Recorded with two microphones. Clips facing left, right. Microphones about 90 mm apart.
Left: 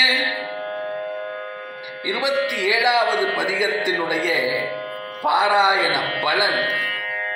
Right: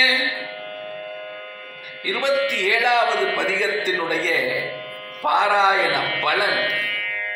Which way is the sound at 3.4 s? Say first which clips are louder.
Left 1 dB; 10° left (ahead or behind).